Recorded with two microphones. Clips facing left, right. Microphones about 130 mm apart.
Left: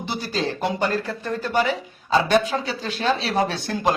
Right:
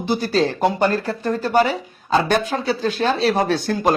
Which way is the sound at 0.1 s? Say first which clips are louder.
Right 7 dB; 45° right (ahead or behind).